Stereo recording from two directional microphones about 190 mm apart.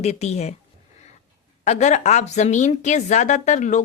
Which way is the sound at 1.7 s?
35° left (ahead or behind).